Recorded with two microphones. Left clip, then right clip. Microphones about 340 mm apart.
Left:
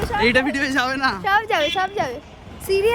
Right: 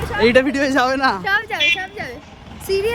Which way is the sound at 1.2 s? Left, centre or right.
Left.